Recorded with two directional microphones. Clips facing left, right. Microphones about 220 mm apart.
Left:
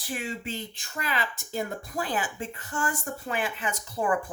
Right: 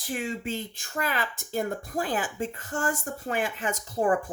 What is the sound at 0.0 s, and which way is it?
Speech, 45° right (ahead or behind).